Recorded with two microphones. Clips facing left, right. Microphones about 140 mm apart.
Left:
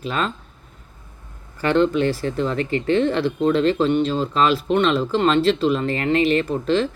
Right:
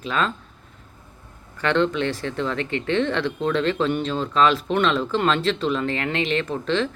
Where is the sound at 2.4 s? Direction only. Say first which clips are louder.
Left 3 dB; 40° left (ahead or behind).